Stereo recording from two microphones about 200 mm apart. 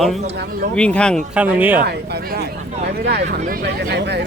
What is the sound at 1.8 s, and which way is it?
Speech, 50° right (ahead or behind).